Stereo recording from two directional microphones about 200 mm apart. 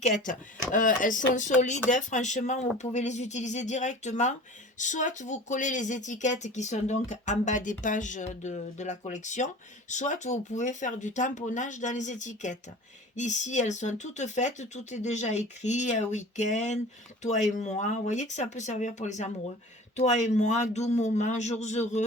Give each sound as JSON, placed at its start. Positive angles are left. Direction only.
{"t": 0.7, "sound": "speech", "side_deg": 40}